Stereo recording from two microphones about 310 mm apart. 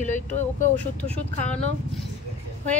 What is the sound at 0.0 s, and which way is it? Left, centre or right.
Speech, left.